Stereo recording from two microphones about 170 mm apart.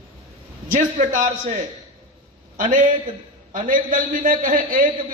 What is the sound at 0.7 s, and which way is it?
Speech, 50° right (ahead or behind).